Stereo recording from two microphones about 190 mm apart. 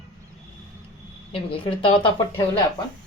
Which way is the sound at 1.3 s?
30° left (ahead or behind).